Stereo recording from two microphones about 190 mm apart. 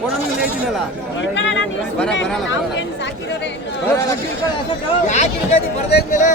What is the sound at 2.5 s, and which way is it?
Chatter, 70° left (ahead or behind).